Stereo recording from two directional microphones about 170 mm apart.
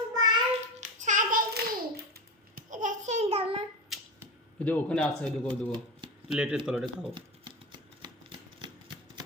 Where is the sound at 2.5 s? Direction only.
50° right (ahead or behind).